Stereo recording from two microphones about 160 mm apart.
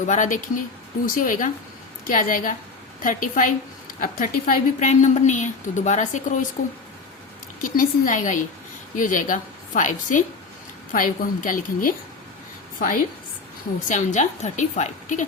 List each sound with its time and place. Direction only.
0.0 s a woman's voice: 50° left (ahead or behind)
7.6 s a woman's voice: 55° left (ahead or behind)
13.8 s a woman's voice: 50° left (ahead or behind)